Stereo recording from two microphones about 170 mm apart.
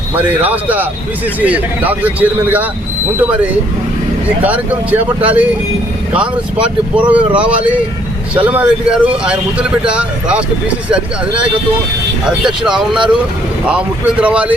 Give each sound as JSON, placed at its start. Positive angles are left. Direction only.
{"t": 0.2, "sound": "speech", "side_deg": -10}
{"t": 12.2, "sound": "speech", "side_deg": -5}